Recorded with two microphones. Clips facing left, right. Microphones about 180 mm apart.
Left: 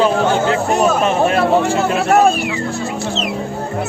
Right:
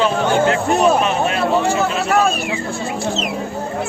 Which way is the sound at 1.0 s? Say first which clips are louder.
Left 3 dB; 50° left (ahead or behind).